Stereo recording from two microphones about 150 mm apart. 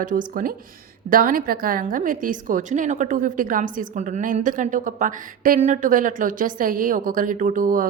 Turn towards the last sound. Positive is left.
turn(degrees=-65)  # may be behind; listen again after turning